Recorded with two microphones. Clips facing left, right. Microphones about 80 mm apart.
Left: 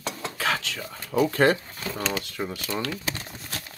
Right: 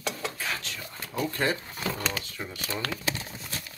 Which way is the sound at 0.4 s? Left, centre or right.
Left.